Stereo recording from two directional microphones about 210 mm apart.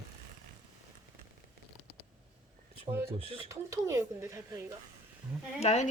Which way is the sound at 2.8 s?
10° right (ahead or behind).